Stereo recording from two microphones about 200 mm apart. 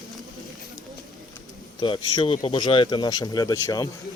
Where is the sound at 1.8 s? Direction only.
25° left (ahead or behind).